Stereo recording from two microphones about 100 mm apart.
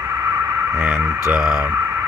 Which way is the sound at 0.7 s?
20° right (ahead or behind).